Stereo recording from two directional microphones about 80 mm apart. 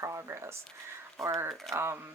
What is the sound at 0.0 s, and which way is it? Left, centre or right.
Speech, right.